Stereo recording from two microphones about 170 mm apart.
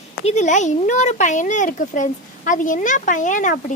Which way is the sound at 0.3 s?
45° left (ahead or behind).